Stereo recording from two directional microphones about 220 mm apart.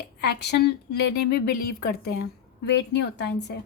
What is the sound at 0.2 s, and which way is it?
A woman's voice, 50° left (ahead or behind).